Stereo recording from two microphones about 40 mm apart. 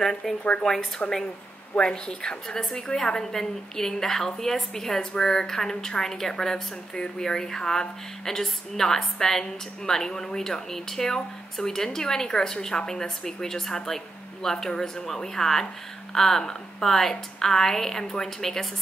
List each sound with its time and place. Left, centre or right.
0.2 s a woman's voice: centre